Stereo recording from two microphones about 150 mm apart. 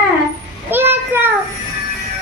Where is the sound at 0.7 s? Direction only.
15° right (ahead or behind).